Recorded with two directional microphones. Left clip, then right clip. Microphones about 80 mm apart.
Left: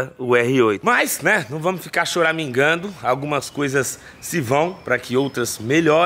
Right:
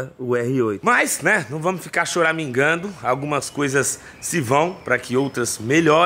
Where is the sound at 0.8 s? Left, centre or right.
Centre.